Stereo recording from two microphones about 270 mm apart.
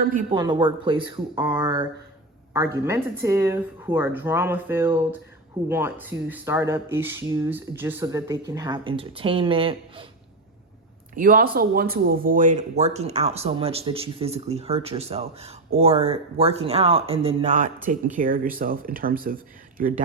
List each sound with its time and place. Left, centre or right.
0.0 s speech: right
0.3 s speech: centre
11.1 s speech: right